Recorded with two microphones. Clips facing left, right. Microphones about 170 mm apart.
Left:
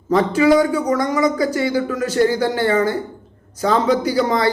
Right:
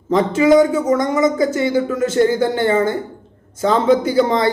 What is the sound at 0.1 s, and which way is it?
Speech, 20° right (ahead or behind).